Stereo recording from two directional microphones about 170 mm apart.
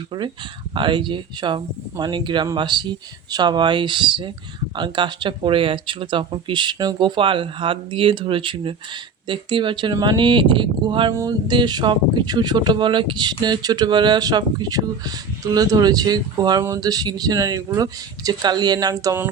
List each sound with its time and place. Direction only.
0.1 s speech: 30° right (ahead or behind)